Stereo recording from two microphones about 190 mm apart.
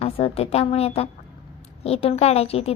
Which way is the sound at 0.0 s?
30° left (ahead or behind).